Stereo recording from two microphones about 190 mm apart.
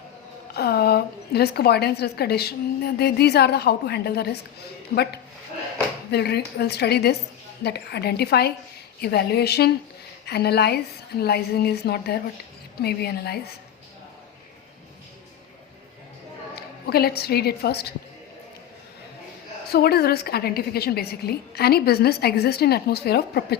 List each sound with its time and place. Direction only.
0.5 s a woman's voice: 55° left (ahead or behind)
6.1 s a woman's voice: 60° left (ahead or behind)
16.8 s a woman's voice: 55° left (ahead or behind)
19.7 s a woman's voice: 55° left (ahead or behind)